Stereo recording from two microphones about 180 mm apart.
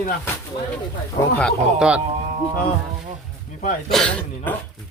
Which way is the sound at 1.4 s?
5° left (ahead or behind).